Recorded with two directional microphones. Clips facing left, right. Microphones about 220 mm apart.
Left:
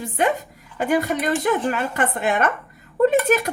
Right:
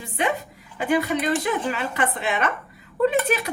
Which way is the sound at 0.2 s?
45° left (ahead or behind).